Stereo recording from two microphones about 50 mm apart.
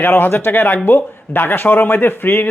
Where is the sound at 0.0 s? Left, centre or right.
Left.